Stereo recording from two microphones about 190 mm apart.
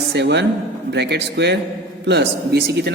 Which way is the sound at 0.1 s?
65° right (ahead or behind).